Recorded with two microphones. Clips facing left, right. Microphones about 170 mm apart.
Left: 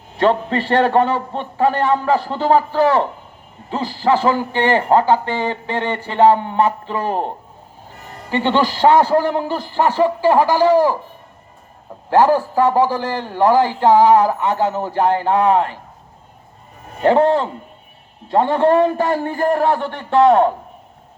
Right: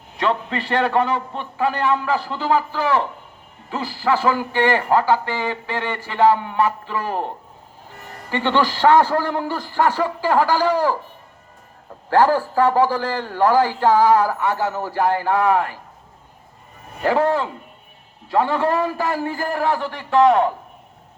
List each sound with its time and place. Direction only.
0.2 s a man's voice: 35° left (ahead or behind)
8.3 s a man's voice: 15° left (ahead or behind)
12.1 s a man's voice: 15° left (ahead or behind)
17.0 s a man's voice: 25° left (ahead or behind)